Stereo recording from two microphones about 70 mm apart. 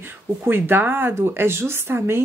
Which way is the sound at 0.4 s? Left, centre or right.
Right.